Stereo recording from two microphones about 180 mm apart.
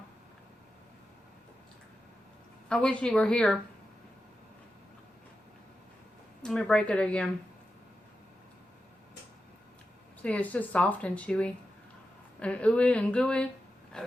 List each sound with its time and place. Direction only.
2.6 s speech: 5° left (ahead or behind)
6.4 s speech: 5° left (ahead or behind)
10.2 s speech: 10° left (ahead or behind)
13.9 s vehicle: 5° left (ahead or behind)